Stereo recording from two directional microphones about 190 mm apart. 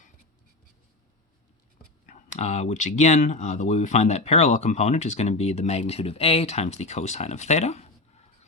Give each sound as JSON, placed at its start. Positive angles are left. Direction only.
{"t": 2.0, "sound": "speech", "side_deg": 40}